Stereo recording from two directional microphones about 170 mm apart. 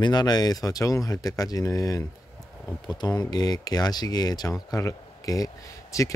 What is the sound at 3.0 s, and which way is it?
Speech, 20° left (ahead or behind).